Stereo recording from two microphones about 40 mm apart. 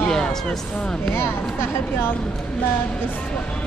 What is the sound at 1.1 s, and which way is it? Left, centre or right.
Speech, left.